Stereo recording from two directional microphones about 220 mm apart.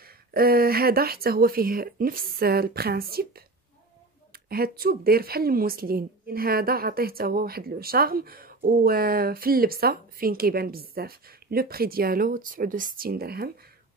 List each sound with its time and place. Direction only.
0.0 s a woman's voice: 45° right (ahead or behind)